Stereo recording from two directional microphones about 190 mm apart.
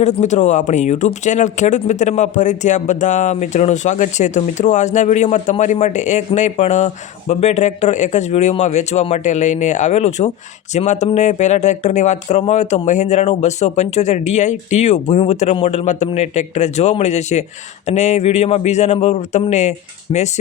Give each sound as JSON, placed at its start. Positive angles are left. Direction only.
{"t": 0.0, "sound": "speech", "side_deg": 40}